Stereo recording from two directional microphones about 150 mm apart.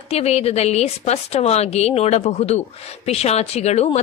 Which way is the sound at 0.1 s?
45° left (ahead or behind).